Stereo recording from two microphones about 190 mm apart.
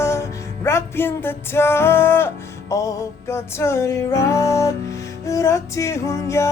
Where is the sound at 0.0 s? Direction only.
15° left (ahead or behind).